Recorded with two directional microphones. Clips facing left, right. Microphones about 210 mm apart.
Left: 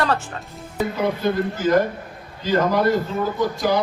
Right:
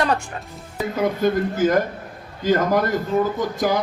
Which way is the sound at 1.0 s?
50° right (ahead or behind).